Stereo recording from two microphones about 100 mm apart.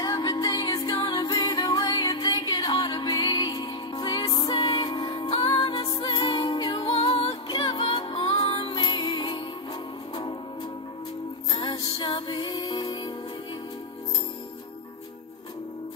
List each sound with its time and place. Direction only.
0.0 s music: 40° left (ahead or behind)
11.5 s music: 60° left (ahead or behind)